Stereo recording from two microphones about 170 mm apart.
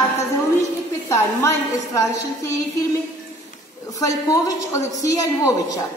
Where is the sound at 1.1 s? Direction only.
15° left (ahead or behind).